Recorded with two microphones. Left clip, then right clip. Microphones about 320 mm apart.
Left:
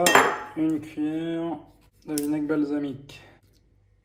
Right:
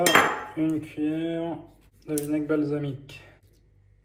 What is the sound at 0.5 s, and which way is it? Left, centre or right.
Speech, left.